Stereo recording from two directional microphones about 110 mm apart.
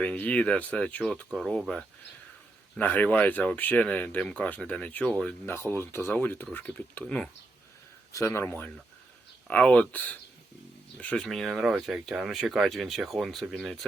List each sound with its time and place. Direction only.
0.0 s speech: 10° left (ahead or behind)
5.5 s speech: 20° left (ahead or behind)
8.1 s speech: 25° left (ahead or behind)
11.3 s speech: centre (ahead or behind)